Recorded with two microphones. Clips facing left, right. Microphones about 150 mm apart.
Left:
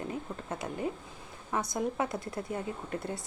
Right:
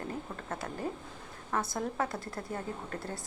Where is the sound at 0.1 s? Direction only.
20° left (ahead or behind).